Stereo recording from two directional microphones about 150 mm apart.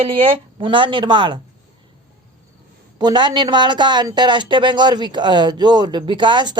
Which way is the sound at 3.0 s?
30° right (ahead or behind).